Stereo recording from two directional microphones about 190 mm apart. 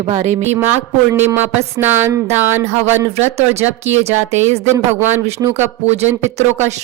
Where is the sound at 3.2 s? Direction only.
35° right (ahead or behind).